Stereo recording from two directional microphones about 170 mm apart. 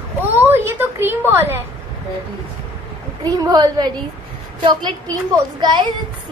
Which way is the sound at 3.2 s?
20° right (ahead or behind).